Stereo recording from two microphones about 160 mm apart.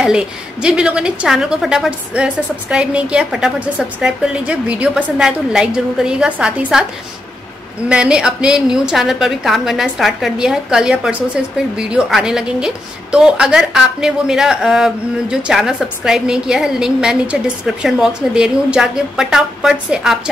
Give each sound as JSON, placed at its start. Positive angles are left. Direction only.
{"t": 0.0, "sound": "a woman's voice", "side_deg": -5}
{"t": 7.9, "sound": "a woman's voice", "side_deg": -5}